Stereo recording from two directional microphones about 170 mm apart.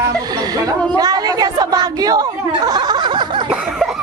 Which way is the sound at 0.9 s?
25° right (ahead or behind).